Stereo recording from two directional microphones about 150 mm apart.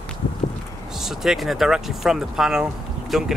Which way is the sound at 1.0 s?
Centre (ahead or behind).